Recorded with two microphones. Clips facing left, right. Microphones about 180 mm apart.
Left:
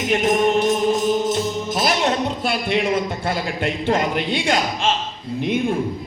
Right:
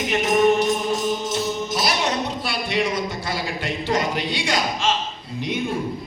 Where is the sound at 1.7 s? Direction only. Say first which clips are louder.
Left 5 dB; 50° left (ahead or behind).